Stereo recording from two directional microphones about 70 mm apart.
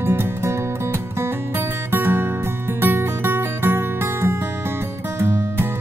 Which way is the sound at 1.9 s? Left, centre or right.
Right.